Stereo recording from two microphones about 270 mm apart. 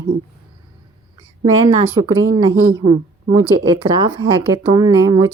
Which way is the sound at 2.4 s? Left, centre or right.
Centre.